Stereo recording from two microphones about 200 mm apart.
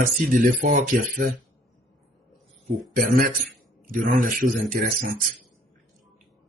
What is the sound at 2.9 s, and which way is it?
Speech, 45° right (ahead or behind).